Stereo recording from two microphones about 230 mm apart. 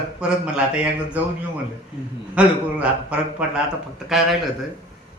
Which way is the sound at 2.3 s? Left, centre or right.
Centre.